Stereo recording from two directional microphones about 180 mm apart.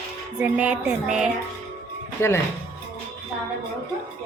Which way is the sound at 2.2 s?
15° left (ahead or behind).